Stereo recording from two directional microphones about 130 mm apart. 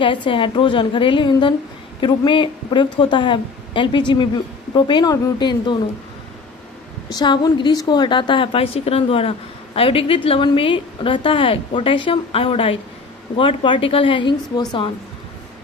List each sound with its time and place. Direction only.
0.0 s a woman's voice: 40° left (ahead or behind)
7.1 s a woman's voice: 30° left (ahead or behind)